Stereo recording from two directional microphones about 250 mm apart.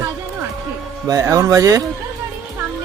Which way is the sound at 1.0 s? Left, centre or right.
Centre.